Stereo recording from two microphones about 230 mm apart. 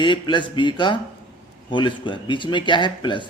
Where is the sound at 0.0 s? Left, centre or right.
Left.